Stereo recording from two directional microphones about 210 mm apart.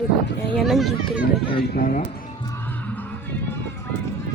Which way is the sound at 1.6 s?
45° left (ahead or behind).